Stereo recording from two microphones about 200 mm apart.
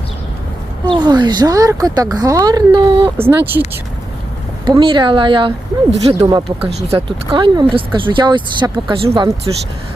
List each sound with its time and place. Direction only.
0.9 s speech: 20° right (ahead or behind)
3.2 s speech: 10° right (ahead or behind)
4.6 s speech: 25° right (ahead or behind)